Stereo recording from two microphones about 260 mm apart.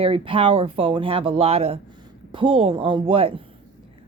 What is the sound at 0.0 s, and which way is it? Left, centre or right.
Speech, centre.